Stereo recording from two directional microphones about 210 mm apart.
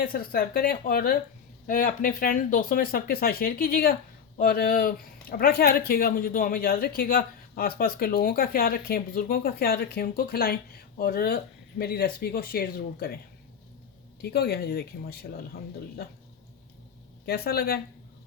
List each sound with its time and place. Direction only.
0.0 s speech: 45° left (ahead or behind)
14.2 s speech: 50° left (ahead or behind)
17.2 s speech: 50° left (ahead or behind)